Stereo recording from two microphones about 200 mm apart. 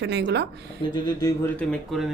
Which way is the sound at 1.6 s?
Centre (ahead or behind).